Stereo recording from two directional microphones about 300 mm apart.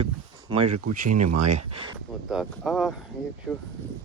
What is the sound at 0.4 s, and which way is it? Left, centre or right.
Speech, centre.